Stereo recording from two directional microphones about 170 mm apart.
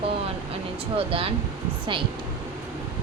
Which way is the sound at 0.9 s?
35° right (ahead or behind).